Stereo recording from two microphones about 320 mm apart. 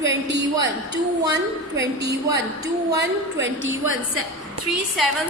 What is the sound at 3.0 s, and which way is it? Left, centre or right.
A woman's voice, right.